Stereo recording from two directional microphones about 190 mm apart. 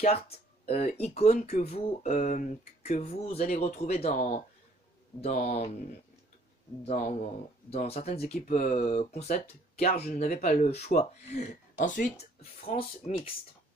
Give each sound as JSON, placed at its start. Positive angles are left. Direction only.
{"t": 0.0, "sound": "speech", "side_deg": 35}
{"t": 6.8, "sound": "speech", "side_deg": 35}